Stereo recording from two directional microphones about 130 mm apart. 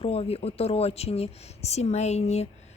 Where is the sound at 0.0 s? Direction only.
50° left (ahead or behind).